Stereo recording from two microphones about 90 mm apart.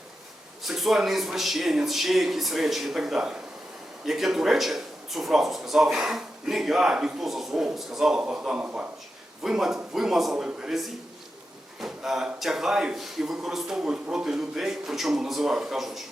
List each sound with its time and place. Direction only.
0.6 s speech: 5° right (ahead or behind)
9.4 s speech: 5° right (ahead or behind)